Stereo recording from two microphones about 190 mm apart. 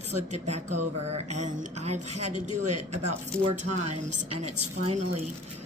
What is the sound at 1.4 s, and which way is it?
Speech, 35° right (ahead or behind).